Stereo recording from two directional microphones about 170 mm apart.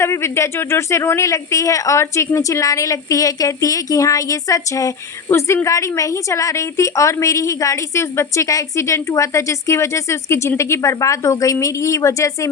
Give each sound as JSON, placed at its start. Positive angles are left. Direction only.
{"t": 0.0, "sound": "speech", "side_deg": 15}